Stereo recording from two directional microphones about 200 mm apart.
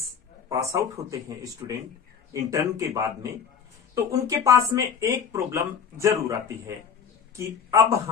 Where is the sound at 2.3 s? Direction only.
15° right (ahead or behind).